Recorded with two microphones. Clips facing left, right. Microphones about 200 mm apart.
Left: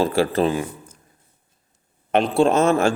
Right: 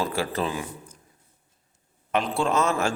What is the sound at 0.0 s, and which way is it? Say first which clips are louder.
Speech: left 8 dB; 30° left (ahead or behind).